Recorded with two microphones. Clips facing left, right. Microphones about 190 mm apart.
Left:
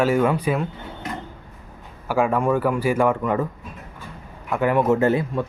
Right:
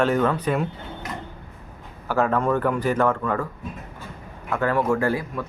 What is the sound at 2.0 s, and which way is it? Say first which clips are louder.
Speech: left 1 dB; 10° left (ahead or behind).